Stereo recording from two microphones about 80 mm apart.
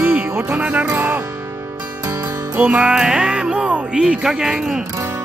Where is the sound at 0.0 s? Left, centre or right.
Right.